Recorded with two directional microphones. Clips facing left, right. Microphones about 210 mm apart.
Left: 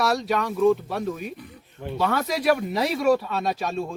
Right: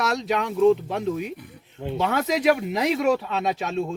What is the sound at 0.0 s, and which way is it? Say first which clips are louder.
Speech: left 1 dB; 20° right (ahead or behind).